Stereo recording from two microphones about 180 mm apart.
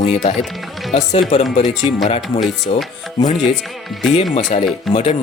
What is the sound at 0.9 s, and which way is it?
Speech, 40° left (ahead or behind).